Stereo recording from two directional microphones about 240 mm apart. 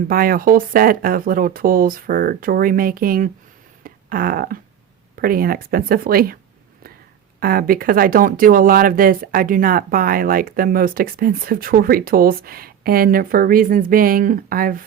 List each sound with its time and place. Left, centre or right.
0.1 s speech: right
3.8 s a sound: right
5.1 s speech: right
7.3 s speech: right